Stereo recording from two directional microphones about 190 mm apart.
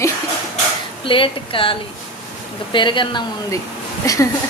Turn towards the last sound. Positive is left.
turn(degrees=15)  # may be behind; listen again after turning